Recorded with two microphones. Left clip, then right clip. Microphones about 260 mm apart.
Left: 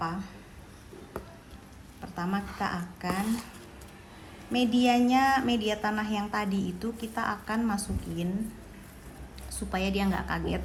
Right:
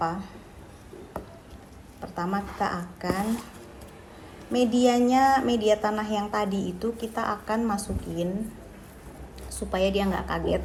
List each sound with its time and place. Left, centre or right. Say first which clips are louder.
0.0 s speech: right 5 dB; left
2.0 s speech: right 4 dB; left
4.5 s speech: right 3 dB; left
9.6 s speech: right 6 dB; left